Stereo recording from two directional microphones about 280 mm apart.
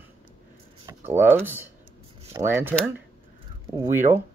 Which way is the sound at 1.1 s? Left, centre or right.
Centre.